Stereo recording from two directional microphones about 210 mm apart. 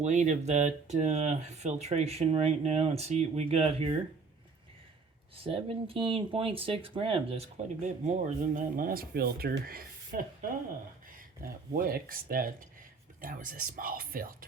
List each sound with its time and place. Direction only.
0.0 s speech: 35° right (ahead or behind)
5.4 s speech: 25° right (ahead or behind); by 10.2 s 45° right (ahead or behind)
11.7 s speech: 45° right (ahead or behind)